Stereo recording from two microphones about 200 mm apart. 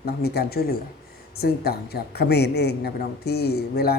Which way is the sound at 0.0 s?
55° left (ahead or behind).